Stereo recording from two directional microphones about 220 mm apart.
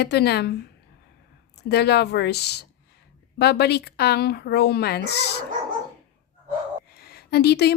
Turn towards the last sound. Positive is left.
turn(degrees=50)  # may be behind; listen again after turning